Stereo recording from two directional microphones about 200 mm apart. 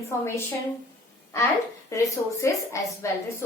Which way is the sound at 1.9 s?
15° left (ahead or behind).